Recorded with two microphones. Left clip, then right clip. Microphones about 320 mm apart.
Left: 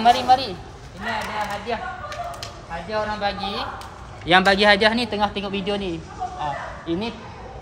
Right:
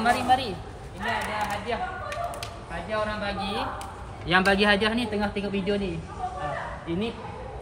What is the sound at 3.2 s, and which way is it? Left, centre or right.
Speech, centre.